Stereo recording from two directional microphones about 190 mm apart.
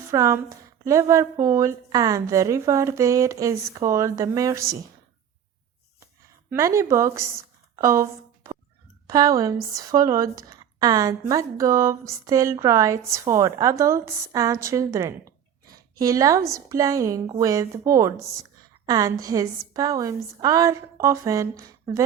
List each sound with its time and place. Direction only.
0.1 s a woman's voice: 15° right (ahead or behind)
6.5 s a woman's voice: 15° right (ahead or behind)
9.0 s a woman's voice: 20° right (ahead or behind)